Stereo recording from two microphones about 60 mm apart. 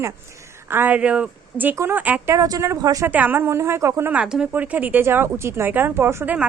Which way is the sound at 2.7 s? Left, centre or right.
Right.